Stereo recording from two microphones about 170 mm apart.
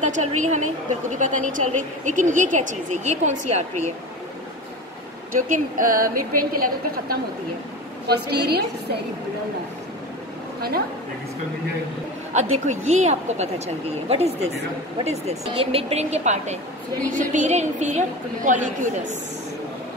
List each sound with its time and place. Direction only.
0.0 s speech: 45° right (ahead or behind)
5.3 s a woman's voice: 55° right (ahead or behind)
8.1 s a woman's voice: 75° right (ahead or behind)
12.4 s speech: 45° right (ahead or behind)